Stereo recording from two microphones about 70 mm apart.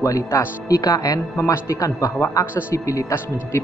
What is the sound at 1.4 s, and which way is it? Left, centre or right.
A man's voice, left.